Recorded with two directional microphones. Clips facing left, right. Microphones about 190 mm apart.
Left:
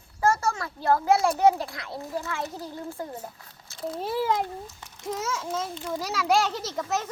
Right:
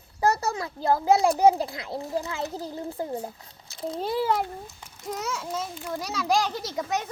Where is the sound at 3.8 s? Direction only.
20° right (ahead or behind).